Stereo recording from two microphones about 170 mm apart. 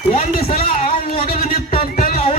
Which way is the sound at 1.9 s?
60° left (ahead or behind).